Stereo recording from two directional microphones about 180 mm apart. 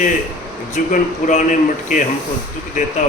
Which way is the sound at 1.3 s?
45° left (ahead or behind).